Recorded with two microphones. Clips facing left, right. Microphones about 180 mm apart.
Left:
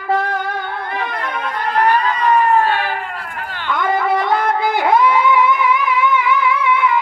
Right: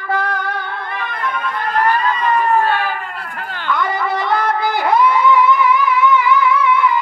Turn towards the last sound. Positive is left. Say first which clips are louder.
# right 2 dB
turn(degrees=55)  # may be behind; listen again after turning